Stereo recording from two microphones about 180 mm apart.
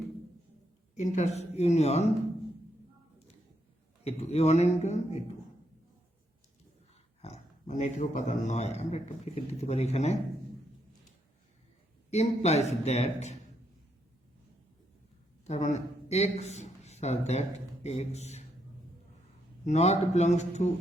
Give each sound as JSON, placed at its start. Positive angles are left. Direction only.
{"t": 0.9, "sound": "speech", "side_deg": 40}
{"t": 4.0, "sound": "speech", "side_deg": 35}
{"t": 7.2, "sound": "speech", "side_deg": 40}
{"t": 12.1, "sound": "speech", "side_deg": 40}
{"t": 15.4, "sound": "a man's voice", "side_deg": 40}
{"t": 19.6, "sound": "speech", "side_deg": 40}